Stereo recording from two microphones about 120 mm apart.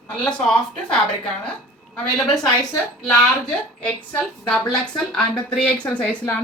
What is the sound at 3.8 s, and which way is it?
A woman's voice, 10° left (ahead or behind).